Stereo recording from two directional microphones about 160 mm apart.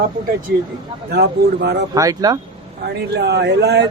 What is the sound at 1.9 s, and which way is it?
Speech, 20° right (ahead or behind).